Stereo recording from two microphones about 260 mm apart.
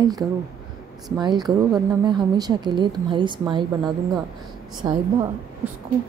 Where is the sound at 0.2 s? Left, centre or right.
Centre.